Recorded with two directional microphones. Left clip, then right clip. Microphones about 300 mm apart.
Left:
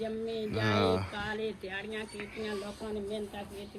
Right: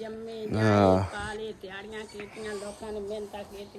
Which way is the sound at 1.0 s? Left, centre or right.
Centre.